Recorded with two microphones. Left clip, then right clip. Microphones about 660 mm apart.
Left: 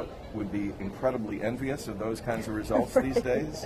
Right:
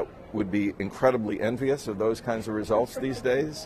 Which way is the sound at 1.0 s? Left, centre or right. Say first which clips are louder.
Right 6 dB; right.